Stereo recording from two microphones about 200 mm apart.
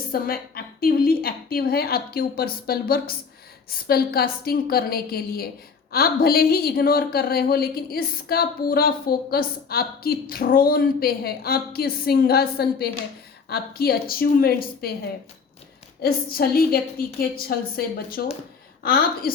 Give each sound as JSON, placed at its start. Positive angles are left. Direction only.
{"t": 0.1, "sound": "a woman's voice", "side_deg": 50}
{"t": 16.0, "sound": "a woman's voice", "side_deg": 50}